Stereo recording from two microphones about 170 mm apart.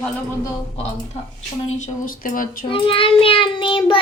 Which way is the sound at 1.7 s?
50° left (ahead or behind).